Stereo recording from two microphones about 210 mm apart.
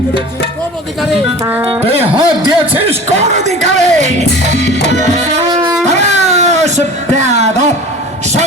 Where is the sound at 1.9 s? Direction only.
30° right (ahead or behind).